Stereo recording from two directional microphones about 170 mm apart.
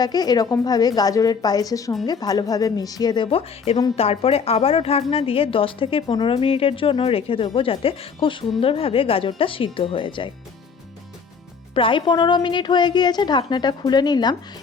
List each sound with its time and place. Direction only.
0.0 s a woman's voice: 25° left (ahead or behind)
3.2 s a woman's voice: 35° left (ahead or behind)
11.7 s a woman's voice: 30° left (ahead or behind)